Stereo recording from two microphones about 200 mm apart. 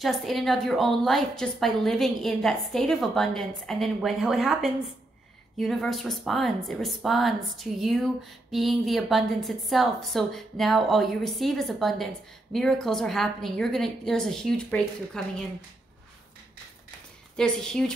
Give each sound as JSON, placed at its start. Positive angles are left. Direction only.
{"t": 0.0, "sound": "speech", "side_deg": 0}
{"t": 17.4, "sound": "speech", "side_deg": 5}